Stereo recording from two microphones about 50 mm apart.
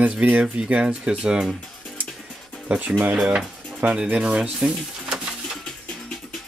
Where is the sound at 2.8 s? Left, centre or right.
Right.